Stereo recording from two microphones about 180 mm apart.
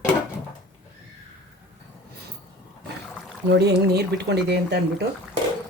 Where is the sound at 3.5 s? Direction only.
65° right (ahead or behind).